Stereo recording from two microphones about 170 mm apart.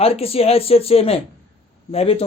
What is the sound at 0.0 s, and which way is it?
Speech, 35° left (ahead or behind).